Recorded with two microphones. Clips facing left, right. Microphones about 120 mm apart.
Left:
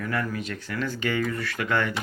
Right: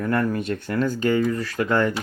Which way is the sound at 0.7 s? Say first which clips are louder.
Right 7 dB; 40° right (ahead or behind).